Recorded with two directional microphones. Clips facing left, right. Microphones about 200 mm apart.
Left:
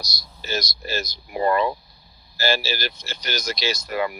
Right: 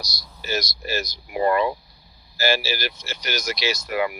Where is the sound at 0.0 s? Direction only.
10° right (ahead or behind).